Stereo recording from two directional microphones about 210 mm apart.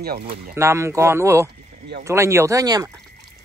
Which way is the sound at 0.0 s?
45° right (ahead or behind).